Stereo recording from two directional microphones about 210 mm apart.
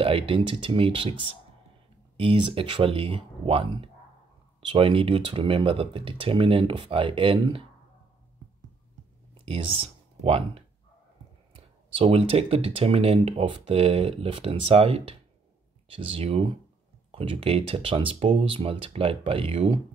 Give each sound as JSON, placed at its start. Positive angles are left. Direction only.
{"t": 0.0, "sound": "speech", "side_deg": -25}
{"t": 9.4, "sound": "speech", "side_deg": -25}